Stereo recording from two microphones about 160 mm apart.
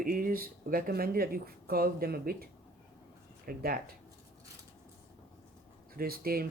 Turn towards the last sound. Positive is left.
turn(degrees=-70)  # may be behind; listen again after turning